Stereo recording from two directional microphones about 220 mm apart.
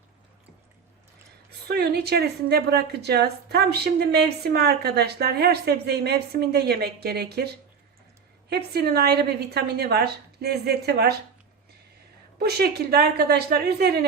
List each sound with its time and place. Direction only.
1.6 s a woman's voice: 45° right (ahead or behind)
12.4 s a woman's voice: 45° right (ahead or behind)